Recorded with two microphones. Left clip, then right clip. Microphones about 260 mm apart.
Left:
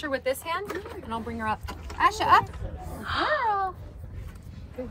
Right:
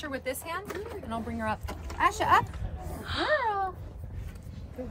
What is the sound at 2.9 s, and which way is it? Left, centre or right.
Gasp, centre.